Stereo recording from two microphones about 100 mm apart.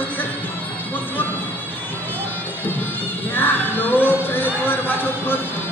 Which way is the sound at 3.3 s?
20° left (ahead or behind).